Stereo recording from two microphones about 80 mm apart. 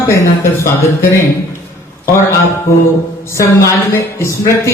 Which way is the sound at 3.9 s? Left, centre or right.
Left.